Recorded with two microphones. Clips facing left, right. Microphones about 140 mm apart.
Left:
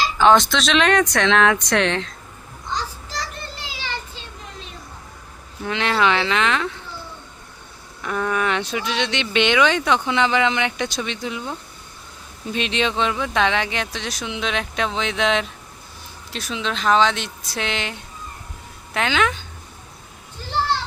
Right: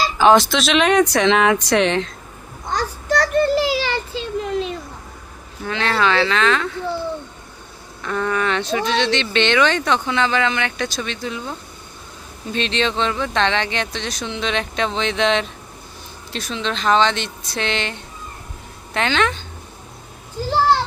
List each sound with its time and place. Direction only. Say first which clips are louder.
0.2 s speech: right 2 dB; 5° right (ahead or behind)
2.6 s child singing: right 7 dB; 60° right (ahead or behind); by 4.7 s 85° right
5.6 s speech: even; 20° left (ahead or behind)
8.0 s speech: right 1 dB; 10° left (ahead or behind)
12.5 s speech: right 1 dB; 10° left (ahead or behind)